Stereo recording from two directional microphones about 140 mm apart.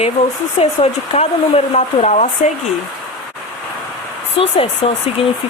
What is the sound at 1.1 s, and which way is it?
Speech, 50° left (ahead or behind).